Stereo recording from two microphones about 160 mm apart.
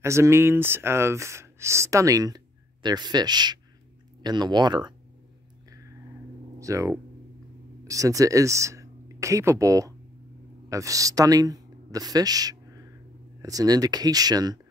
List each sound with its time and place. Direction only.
0.0 s speech: 15° right (ahead or behind)
6.6 s speech: 20° right (ahead or behind)